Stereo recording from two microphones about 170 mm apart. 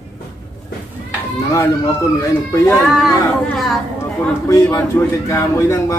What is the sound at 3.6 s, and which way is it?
Speech, centre (ahead or behind).